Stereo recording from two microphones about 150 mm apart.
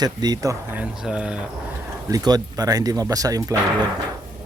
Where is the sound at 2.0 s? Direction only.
25° right (ahead or behind).